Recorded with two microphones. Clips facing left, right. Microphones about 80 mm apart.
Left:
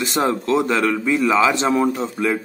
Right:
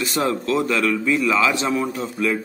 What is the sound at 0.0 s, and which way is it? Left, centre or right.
A man's voice, left.